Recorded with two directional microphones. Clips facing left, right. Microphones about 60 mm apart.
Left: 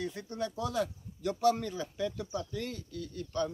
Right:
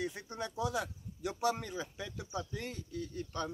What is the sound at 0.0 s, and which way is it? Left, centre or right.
A man's voice, centre.